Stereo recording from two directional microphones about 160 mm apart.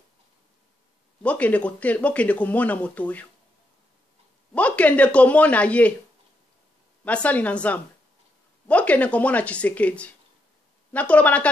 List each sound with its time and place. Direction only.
1.2 s speech: 10° left (ahead or behind)
4.6 s speech: 10° left (ahead or behind)
7.1 s speech: 10° left (ahead or behind)